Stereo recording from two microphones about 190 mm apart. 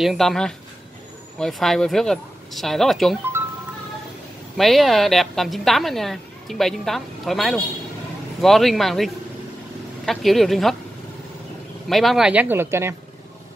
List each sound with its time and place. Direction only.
0.0 s a woman's voice: centre (ahead or behind)
4.6 s a woman's voice: centre (ahead or behind)
11.9 s speech: centre (ahead or behind)